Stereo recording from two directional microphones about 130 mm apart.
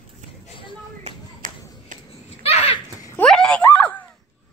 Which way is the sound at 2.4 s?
50° left (ahead or behind).